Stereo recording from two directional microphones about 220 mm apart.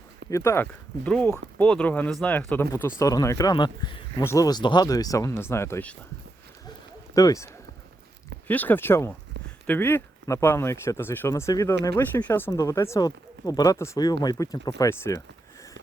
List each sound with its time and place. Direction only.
0.3 s speech: 15° left (ahead or behind)
7.1 s speech: 15° left (ahead or behind)